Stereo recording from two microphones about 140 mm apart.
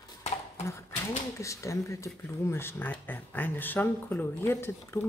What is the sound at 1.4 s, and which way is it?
A woman's voice, 20° left (ahead or behind).